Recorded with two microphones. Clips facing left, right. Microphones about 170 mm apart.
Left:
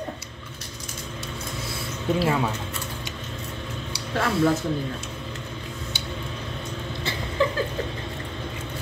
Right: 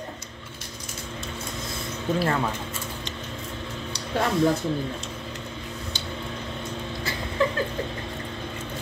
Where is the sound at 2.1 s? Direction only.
5° left (ahead or behind).